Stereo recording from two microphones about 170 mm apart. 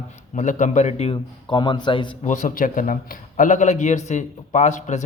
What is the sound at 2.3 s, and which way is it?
A man's voice, 50° left (ahead or behind).